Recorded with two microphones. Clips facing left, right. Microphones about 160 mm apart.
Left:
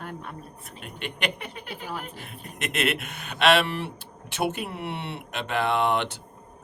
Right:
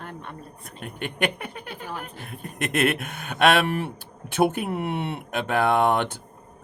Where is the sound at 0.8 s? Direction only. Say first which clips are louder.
Right 4 dB; 50° right (ahead or behind).